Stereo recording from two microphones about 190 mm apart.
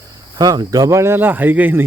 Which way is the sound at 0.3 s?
20° right (ahead or behind).